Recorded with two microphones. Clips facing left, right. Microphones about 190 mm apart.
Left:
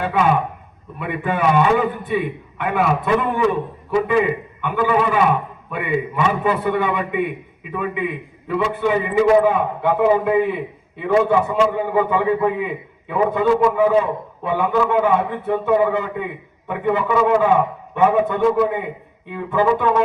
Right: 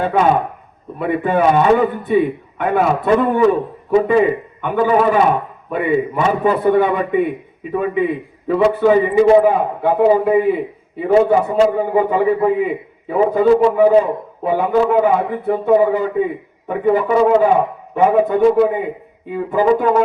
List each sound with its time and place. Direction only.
0.0 s a man's voice: 35° right (ahead or behind)
4.0 s a man's voice: 40° right (ahead or behind)